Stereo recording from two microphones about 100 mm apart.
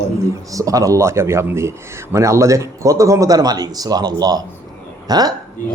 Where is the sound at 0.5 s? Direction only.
35° right (ahead or behind).